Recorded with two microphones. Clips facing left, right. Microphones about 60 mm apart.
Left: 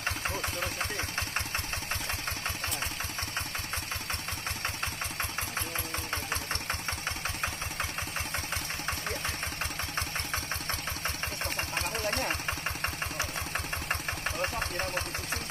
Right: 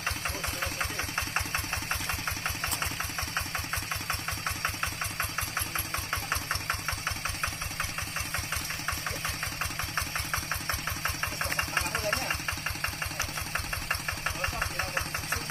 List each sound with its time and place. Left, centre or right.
0.4 s engine: centre
6.3 s engine: centre
9.2 s engine: centre
11.7 s engine: right
12.3 s engine: centre